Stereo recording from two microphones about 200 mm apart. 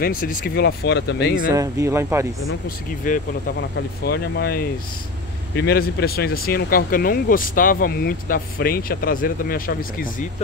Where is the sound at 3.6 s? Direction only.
55° left (ahead or behind).